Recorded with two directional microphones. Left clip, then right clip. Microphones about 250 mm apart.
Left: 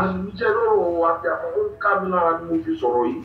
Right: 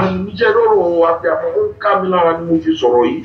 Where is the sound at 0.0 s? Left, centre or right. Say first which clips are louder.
Right 8 dB; right.